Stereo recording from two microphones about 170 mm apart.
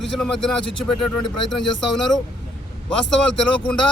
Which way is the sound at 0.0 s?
Centre (ahead or behind).